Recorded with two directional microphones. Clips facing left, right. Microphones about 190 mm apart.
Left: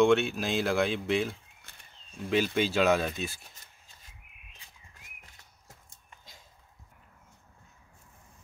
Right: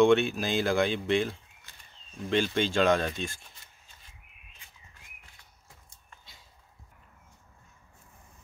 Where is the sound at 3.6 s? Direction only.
45° left (ahead or behind).